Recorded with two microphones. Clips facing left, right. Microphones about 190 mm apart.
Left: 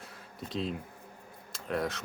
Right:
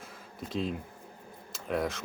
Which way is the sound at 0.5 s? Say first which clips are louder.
Right 2 dB; centre (ahead or behind).